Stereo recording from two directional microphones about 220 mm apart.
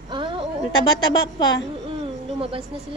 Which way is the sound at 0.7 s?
20° left (ahead or behind).